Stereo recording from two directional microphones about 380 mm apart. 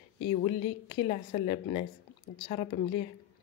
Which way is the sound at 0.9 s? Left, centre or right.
Centre.